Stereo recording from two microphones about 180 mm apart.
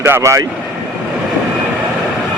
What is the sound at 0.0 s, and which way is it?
Speech, 15° right (ahead or behind).